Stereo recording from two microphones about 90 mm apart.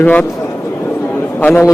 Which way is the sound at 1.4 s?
20° left (ahead or behind).